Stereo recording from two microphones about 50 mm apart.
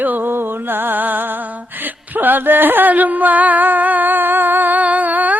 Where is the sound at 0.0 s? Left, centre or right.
Right.